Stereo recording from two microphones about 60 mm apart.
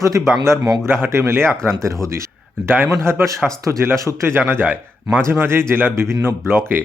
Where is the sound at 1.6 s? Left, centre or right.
Right.